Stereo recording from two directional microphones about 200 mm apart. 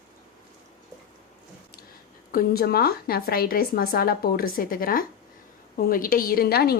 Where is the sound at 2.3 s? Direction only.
50° left (ahead or behind).